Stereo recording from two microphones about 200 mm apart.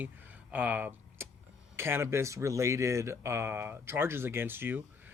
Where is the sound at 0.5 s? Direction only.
5° right (ahead or behind).